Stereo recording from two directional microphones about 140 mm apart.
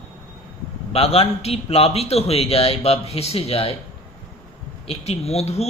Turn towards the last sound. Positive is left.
turn(degrees=50)  # may be behind; listen again after turning